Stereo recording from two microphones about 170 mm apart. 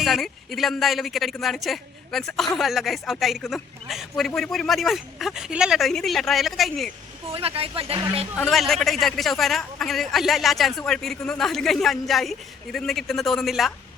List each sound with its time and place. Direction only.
0.0 s a man's voice: centre (ahead or behind)
7.3 s speech: 35° right (ahead or behind)
8.4 s a man's voice: centre (ahead or behind)